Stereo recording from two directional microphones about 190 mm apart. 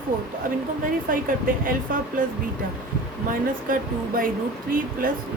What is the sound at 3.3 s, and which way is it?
Speech, 45° right (ahead or behind).